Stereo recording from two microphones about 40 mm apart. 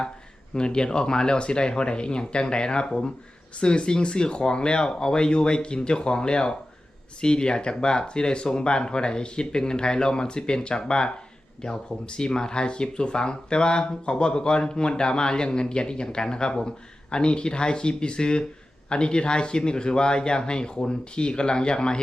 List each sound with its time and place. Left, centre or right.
0.5 s speech: left